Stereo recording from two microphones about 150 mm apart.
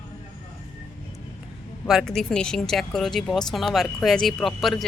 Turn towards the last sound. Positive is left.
turn(degrees=0)  # may be behind; listen again after turning